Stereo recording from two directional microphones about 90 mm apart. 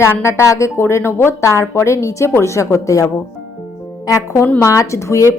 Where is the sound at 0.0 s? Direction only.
30° left (ahead or behind).